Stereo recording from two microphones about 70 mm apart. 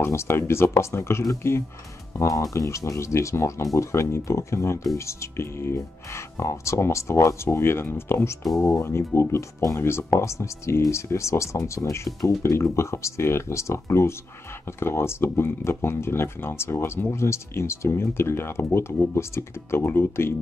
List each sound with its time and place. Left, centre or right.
0.0 s speech: left
2.1 s speech: left